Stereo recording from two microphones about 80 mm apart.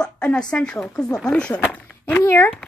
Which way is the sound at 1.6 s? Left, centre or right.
Left.